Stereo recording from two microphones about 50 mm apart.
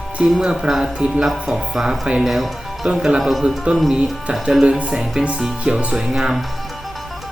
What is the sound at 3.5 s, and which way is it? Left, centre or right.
Speech, right.